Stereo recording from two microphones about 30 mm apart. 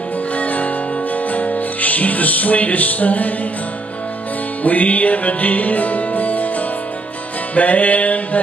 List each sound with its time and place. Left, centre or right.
0.4 s music: left
4.6 s music: left
7.5 s music: left